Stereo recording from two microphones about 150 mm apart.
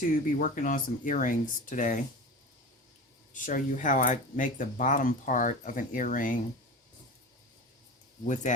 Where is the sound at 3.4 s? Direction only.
60° left (ahead or behind).